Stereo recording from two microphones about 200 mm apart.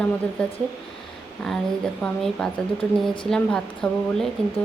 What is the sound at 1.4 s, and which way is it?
A woman's voice, centre (ahead or behind).